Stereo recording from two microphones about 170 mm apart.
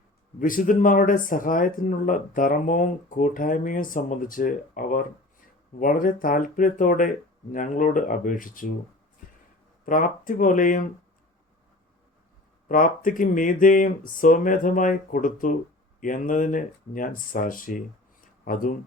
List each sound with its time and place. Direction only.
0.3 s speech: 55° left (ahead or behind)
9.8 s speech: 55° left (ahead or behind)
12.6 s speech: 50° left (ahead or behind)